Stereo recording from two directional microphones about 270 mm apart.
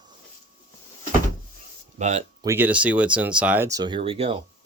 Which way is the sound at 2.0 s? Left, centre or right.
Right.